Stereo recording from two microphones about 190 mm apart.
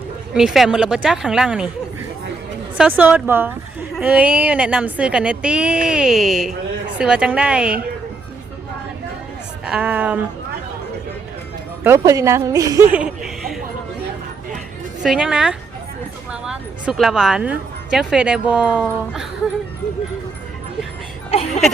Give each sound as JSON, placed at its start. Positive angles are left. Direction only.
{"t": 0.3, "sound": "a woman's voice", "side_deg": 0}
{"t": 2.7, "sound": "a woman's voice", "side_deg": -5}
{"t": 9.6, "sound": "a woman's voice", "side_deg": -5}
{"t": 11.8, "sound": "a woman's voice", "side_deg": -15}
{"t": 12.9, "sound": "chuckle", "side_deg": -5}
{"t": 15.0, "sound": "a woman's voice", "side_deg": -5}
{"t": 21.2, "sound": "speech", "side_deg": 35}